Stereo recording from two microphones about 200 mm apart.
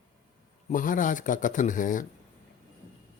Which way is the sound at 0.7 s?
40° left (ahead or behind).